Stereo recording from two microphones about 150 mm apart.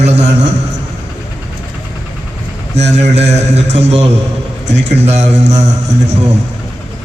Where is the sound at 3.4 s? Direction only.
45° right (ahead or behind).